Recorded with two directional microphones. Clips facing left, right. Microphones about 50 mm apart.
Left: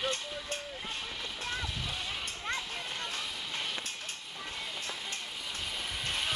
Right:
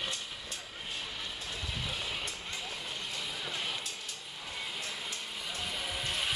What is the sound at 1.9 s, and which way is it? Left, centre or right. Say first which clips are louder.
Music: even; centre.